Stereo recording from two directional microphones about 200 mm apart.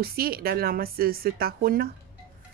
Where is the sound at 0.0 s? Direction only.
50° right (ahead or behind).